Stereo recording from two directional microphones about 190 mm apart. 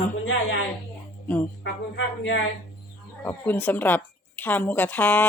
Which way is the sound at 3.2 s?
10° left (ahead or behind).